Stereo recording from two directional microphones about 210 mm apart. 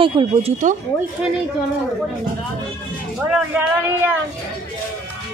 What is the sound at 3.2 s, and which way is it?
Speech, 5° right (ahead or behind).